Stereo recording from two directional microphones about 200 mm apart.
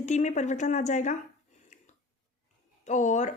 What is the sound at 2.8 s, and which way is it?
Speech, 35° left (ahead or behind).